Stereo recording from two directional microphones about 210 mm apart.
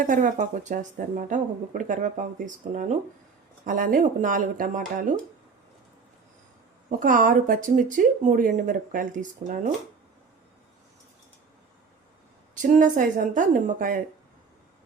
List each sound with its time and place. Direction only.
0.0 s speech: 40° right (ahead or behind)
7.0 s speech: 40° right (ahead or behind)
12.6 s speech: 35° right (ahead or behind)